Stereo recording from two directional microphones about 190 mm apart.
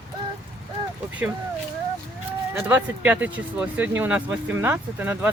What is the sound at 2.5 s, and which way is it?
Speech, 10° right (ahead or behind).